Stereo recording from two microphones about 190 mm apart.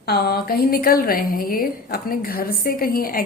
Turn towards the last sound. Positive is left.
turn(degrees=50)  # may be behind; listen again after turning